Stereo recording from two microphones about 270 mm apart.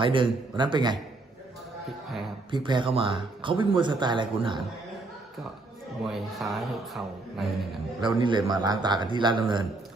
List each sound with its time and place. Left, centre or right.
0.0 s speech: centre
2.5 s speech: centre
6.1 s a man's voice: centre
8.0 s speech: centre